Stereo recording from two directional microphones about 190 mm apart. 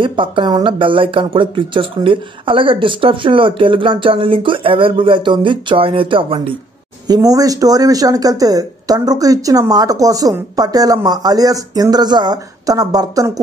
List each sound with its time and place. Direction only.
0.0 s speech: 25° right (ahead or behind)